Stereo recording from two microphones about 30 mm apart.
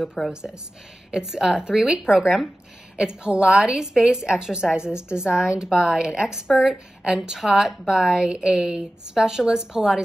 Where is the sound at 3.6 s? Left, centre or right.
Right.